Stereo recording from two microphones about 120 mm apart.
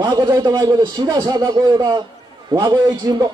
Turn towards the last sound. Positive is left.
turn(degrees=-35)  # may be behind; listen again after turning